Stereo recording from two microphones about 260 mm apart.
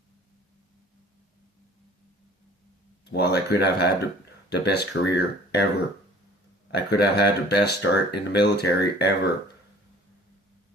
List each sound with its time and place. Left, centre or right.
3.0 s speech: left
6.7 s speech: left